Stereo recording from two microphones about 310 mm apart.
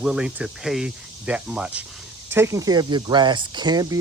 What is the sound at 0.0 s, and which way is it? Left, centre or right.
Speech, centre.